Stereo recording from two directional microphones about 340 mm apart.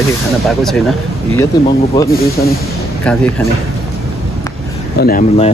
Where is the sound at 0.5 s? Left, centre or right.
Centre.